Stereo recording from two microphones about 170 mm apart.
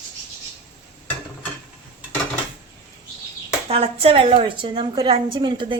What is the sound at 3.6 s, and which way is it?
A woman's voice, 35° right (ahead or behind).